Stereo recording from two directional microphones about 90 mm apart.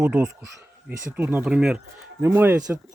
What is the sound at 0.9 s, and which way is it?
Speech, 20° right (ahead or behind).